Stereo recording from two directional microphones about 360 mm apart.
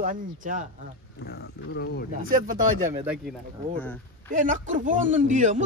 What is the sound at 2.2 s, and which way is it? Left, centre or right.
Speech, right.